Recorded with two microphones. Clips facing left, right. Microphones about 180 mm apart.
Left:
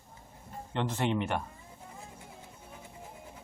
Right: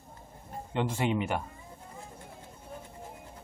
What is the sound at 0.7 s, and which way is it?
Speech, 10° right (ahead or behind).